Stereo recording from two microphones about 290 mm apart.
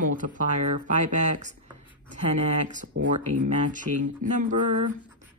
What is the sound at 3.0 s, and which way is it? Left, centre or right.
Speech, right.